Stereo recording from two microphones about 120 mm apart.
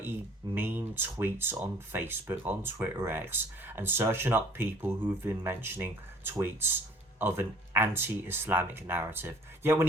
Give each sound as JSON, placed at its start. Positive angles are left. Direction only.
{"t": 0.5, "sound": "speech", "side_deg": -15}